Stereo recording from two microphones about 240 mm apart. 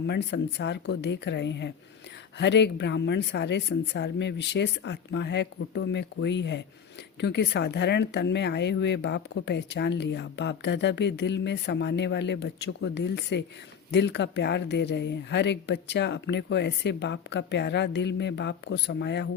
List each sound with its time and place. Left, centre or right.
0.1 s speech: left